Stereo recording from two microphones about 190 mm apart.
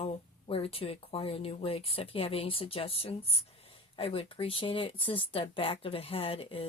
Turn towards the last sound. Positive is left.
turn(degrees=30)  # may be behind; listen again after turning